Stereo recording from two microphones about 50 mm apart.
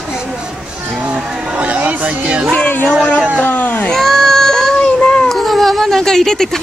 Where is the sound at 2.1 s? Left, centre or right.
Right.